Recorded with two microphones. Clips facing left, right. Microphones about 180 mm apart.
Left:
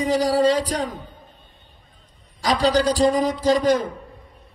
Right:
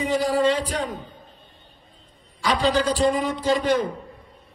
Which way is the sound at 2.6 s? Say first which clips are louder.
Left 3 dB; 40° left (ahead or behind).